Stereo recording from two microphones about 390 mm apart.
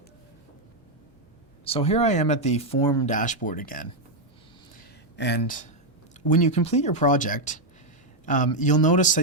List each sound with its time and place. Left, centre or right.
1.6 s speech: centre
5.1 s speech: left